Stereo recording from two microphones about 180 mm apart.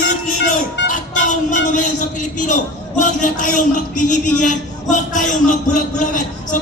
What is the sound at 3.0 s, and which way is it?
A man's voice, 45° left (ahead or behind).